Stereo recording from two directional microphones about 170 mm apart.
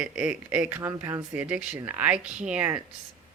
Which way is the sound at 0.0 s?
5° right (ahead or behind).